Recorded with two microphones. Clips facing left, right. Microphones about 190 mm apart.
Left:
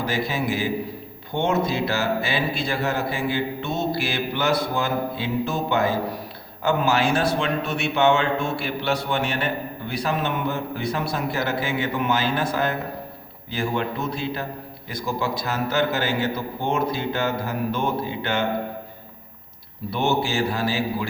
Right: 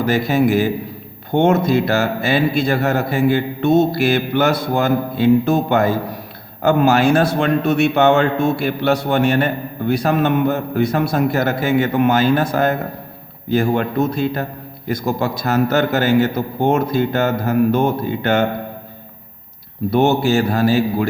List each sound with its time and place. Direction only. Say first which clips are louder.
0.0 s a man's voice: right 9 dB; 45° right (ahead or behind)
19.9 s a man's voice: right 8 dB; 45° right (ahead or behind)